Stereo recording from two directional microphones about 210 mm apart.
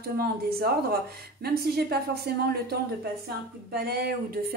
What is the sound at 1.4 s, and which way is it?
Speech, 50° right (ahead or behind).